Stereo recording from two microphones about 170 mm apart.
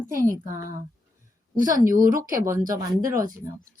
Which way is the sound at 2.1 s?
55° right (ahead or behind).